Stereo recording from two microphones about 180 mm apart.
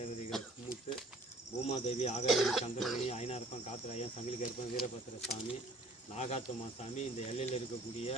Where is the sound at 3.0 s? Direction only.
35° left (ahead or behind).